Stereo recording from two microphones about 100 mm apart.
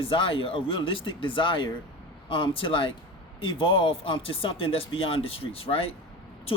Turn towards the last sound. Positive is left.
turn(degrees=70)  # may be behind; listen again after turning